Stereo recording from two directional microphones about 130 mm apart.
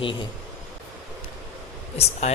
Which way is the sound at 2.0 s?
50° left (ahead or behind).